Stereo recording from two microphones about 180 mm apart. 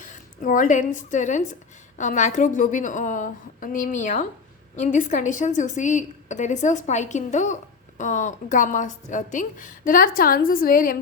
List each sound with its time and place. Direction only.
0.0 s a woman's voice: 45° left (ahead or behind)